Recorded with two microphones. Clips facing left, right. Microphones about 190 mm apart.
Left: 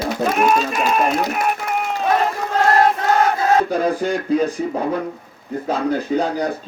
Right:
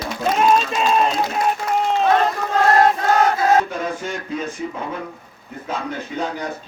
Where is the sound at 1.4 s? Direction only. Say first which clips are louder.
Right 1 dB; 25° right (ahead or behind).